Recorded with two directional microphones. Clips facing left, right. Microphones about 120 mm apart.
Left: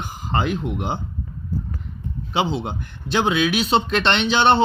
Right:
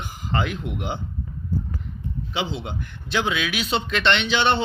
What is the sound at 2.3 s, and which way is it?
Speech, 40° left (ahead or behind).